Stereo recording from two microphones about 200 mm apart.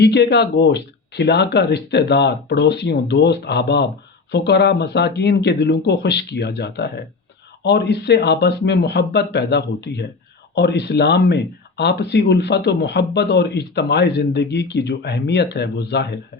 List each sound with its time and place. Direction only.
0.0 s speech: 55° left (ahead or behind)